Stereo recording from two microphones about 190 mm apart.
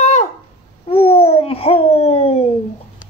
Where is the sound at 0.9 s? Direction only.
30° left (ahead or behind).